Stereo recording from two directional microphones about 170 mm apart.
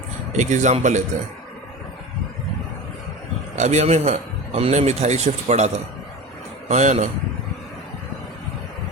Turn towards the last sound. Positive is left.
turn(degrees=-45)  # may be behind; listen again after turning